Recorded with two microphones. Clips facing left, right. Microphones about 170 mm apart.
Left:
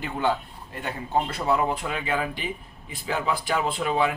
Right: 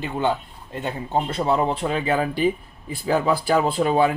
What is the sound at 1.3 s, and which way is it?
Speech, 30° right (ahead or behind).